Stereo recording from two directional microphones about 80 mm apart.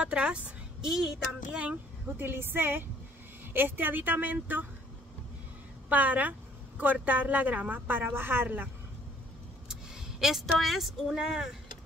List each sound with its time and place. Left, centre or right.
0.0 s a woman's voice: centre
2.2 s a woman's voice: right
5.9 s a woman's voice: centre
9.7 s speech: centre